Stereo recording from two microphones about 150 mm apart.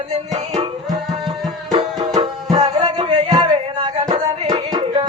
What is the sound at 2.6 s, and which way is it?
Music, 45° right (ahead or behind).